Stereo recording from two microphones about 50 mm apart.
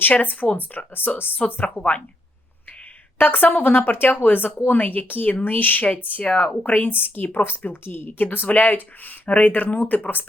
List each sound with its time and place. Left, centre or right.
0.1 s speech: left
3.2 s speech: left
6.3 s speech: left
6.7 s speech: left